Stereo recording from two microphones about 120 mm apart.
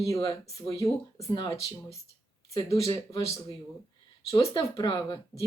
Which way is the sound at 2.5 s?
25° left (ahead or behind).